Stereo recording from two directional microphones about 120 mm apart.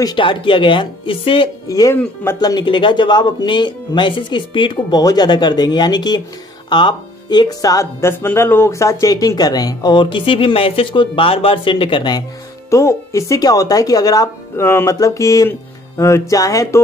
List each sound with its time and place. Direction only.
0.0 s speech: 40° left (ahead or behind)
1.7 s speech: 30° left (ahead or behind)
12.6 s speech: 25° left (ahead or behind)